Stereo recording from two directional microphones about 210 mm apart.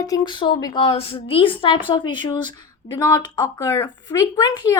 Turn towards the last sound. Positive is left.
turn(degrees=20)  # may be behind; listen again after turning